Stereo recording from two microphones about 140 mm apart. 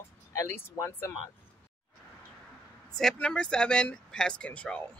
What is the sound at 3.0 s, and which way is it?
Speech, 5° left (ahead or behind).